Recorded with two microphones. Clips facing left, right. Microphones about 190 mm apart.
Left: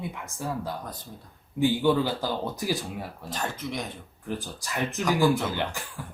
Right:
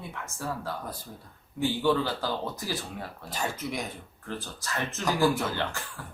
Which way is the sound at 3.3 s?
10° right (ahead or behind).